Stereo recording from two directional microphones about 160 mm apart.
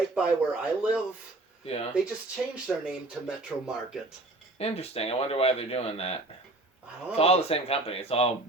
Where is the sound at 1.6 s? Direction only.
40° left (ahead or behind).